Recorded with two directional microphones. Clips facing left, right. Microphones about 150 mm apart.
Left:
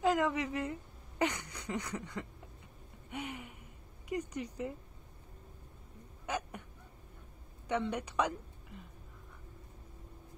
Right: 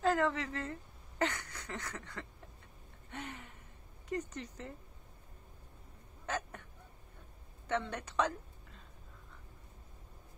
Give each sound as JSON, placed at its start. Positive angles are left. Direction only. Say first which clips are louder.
{"t": 0.0, "sound": "a woman's voice", "louder": "left 1 dB", "side_deg": 15}
{"t": 3.1, "sound": "a sound", "louder": "left 4 dB", "side_deg": 10}
{"t": 4.1, "sound": "speech", "louder": "left 2 dB", "side_deg": 10}
{"t": 6.2, "sound": "hiccup", "louder": "left 1 dB", "side_deg": 10}
{"t": 7.6, "sound": "a woman's voice", "louder": "left 2 dB", "side_deg": 15}